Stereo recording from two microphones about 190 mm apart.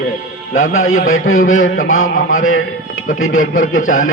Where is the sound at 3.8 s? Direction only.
90° left.